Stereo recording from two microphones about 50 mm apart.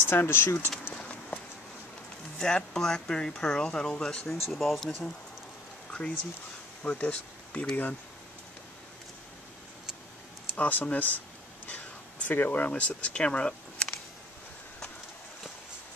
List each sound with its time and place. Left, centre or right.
0.0 s speech: left
2.3 s speech: centre
4.3 s speech: centre
5.9 s a sound: centre
6.8 s speech: left
10.5 s speech: left
11.6 s a sound: left
13.1 s speech: left